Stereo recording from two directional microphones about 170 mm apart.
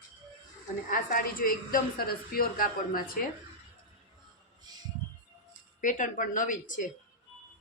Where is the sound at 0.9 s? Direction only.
55° left (ahead or behind).